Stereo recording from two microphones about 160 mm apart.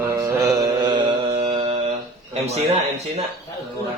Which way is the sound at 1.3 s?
40° right (ahead or behind).